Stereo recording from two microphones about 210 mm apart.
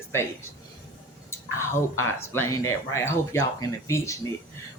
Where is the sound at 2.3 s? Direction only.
10° left (ahead or behind).